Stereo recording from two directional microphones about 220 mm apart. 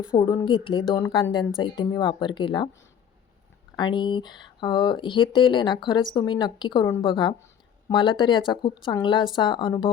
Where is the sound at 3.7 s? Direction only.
20° left (ahead or behind).